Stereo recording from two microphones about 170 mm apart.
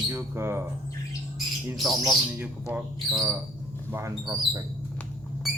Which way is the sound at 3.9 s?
20° right (ahead or behind).